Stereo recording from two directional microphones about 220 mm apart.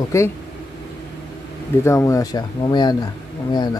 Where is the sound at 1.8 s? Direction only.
15° left (ahead or behind).